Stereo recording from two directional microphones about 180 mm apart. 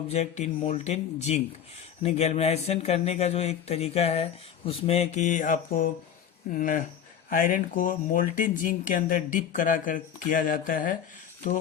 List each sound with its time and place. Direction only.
0.1 s speech: 40° left (ahead or behind)